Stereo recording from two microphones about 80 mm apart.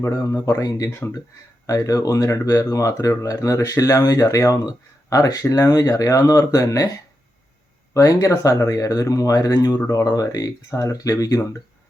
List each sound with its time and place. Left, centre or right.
0.4 s speech: left
7.9 s speech: left